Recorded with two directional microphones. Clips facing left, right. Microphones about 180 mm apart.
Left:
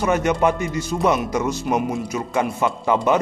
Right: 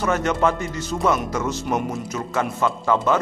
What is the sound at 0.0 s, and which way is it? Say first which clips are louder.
Speech: left 2 dB; 15° left (ahead or behind).